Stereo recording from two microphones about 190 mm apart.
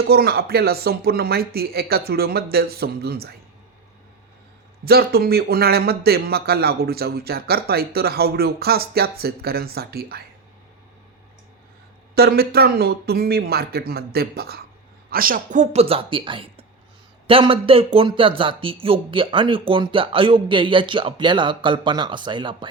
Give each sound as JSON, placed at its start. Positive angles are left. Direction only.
{"t": 0.0, "sound": "speech", "side_deg": -55}
{"t": 4.9, "sound": "speech", "side_deg": -55}
{"t": 12.1, "sound": "speech", "side_deg": -55}